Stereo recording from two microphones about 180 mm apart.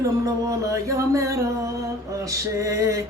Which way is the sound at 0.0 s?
20° right (ahead or behind).